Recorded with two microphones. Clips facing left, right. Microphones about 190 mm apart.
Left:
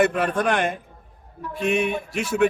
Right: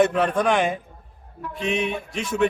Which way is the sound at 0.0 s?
5° left (ahead or behind).